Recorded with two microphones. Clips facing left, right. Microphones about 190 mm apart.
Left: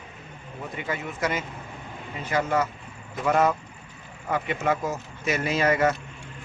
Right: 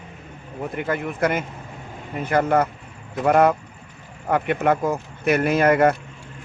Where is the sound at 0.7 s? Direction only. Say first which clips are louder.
Right 6 dB; 55° right (ahead or behind).